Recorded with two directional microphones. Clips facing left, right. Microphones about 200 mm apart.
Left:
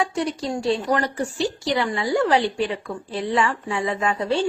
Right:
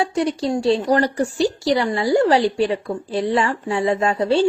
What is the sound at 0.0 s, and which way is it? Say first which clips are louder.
Speech: right 4 dB; 35° right (ahead or behind).